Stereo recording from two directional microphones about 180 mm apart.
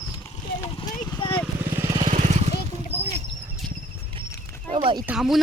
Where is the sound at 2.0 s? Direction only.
40° right (ahead or behind).